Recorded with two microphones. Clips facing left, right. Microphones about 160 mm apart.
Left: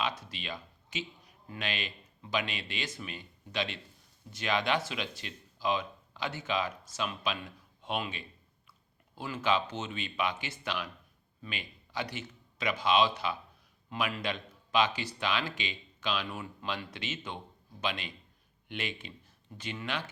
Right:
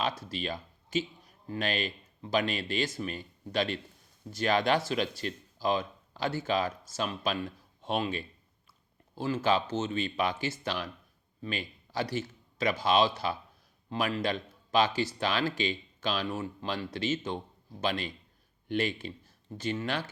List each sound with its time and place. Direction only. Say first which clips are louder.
0.0 s a man's voice: right 3 dB; 40° right (ahead or behind)
12.1 s a sound: right 8 dB; 35° right (ahead or behind)
12.8 s a man's voice: even; 40° right (ahead or behind)